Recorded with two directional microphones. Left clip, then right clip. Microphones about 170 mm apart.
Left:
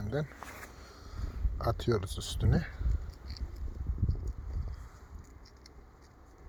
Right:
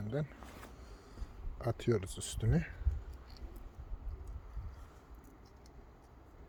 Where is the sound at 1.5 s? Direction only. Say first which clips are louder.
Left 3 dB; 10° right (ahead or behind).